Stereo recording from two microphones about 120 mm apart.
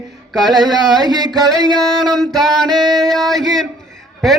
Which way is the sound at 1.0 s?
35° right (ahead or behind).